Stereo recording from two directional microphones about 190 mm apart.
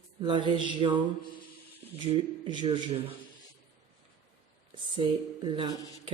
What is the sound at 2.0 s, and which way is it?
Speech, 25° right (ahead or behind).